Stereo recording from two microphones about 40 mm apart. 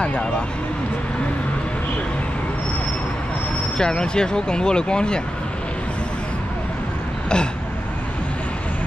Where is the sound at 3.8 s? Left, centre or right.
Centre.